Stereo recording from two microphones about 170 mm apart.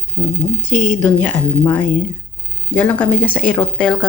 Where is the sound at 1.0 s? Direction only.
10° left (ahead or behind).